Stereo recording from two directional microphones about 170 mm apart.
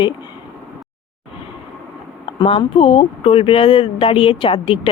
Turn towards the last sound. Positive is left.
turn(degrees=30)  # may be behind; listen again after turning